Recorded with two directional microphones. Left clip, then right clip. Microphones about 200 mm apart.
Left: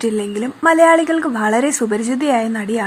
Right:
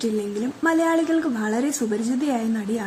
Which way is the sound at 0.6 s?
20° left (ahead or behind).